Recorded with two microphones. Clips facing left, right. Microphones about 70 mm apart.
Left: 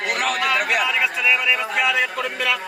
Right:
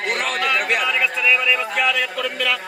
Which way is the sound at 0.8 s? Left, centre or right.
Centre.